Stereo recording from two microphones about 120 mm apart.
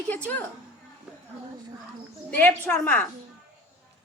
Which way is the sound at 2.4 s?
15° left (ahead or behind).